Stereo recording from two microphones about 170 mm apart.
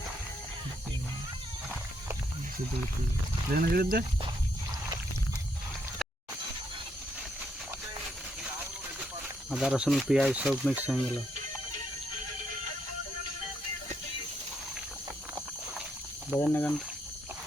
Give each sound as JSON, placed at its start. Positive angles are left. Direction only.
{"t": 3.5, "sound": "speech", "side_deg": -60}
{"t": 9.5, "sound": "speech", "side_deg": -5}
{"t": 16.4, "sound": "speech", "side_deg": 10}